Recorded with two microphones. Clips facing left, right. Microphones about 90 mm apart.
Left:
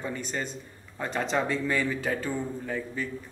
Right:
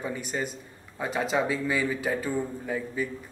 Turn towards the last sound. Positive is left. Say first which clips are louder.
# right 2 dB
turn(degrees=-10)  # may be behind; listen again after turning